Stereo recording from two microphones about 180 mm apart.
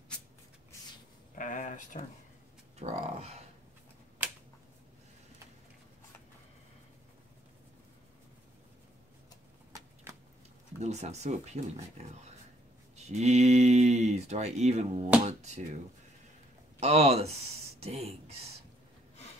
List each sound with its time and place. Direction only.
1.3 s speech: 45° left (ahead or behind)
2.8 s speech: 40° right (ahead or behind)
10.8 s speech: 40° right (ahead or behind)
16.8 s speech: 35° right (ahead or behind)